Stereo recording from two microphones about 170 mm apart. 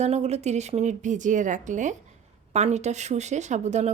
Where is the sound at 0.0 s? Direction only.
40° right (ahead or behind).